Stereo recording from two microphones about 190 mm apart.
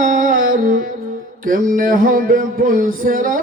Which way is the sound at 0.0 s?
40° right (ahead or behind).